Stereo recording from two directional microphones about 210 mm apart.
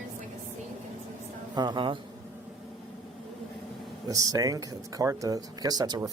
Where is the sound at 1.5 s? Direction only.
20° right (ahead or behind).